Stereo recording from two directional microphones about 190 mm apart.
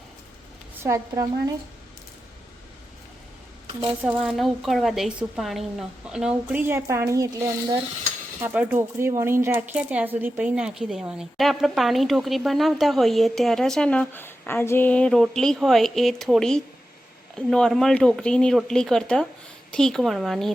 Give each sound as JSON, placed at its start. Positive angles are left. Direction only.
{"t": 0.8, "sound": "speech", "side_deg": -15}
{"t": 4.0, "sound": "speech", "side_deg": 0}